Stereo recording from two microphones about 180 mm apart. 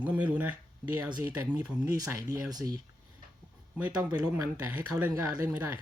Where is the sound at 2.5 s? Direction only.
20° right (ahead or behind).